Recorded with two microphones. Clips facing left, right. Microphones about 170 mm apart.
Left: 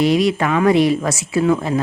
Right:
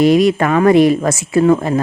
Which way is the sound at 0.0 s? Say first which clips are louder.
Right 5 dB; 50° right (ahead or behind).